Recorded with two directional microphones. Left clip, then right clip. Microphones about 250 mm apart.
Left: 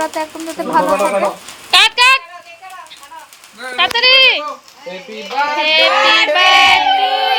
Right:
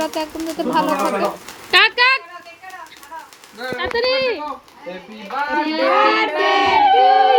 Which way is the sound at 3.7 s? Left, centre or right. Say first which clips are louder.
Left 9 dB; centre.